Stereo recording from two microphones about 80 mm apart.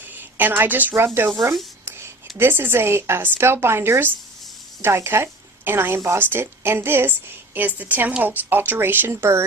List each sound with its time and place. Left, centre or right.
0.0 s a woman's voice: right
2.4 s a woman's voice: right